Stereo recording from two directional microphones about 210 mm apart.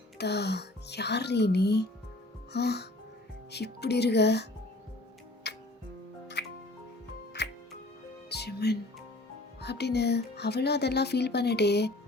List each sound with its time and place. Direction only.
0.2 s speech: 55° left (ahead or behind)
5.5 s music: 55° left (ahead or behind)
8.3 s music: 50° left (ahead or behind)
9.6 s speech: 50° left (ahead or behind)